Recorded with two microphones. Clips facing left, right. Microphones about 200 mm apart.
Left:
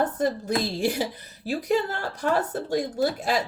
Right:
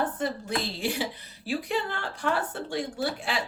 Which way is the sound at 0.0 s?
40° left (ahead or behind).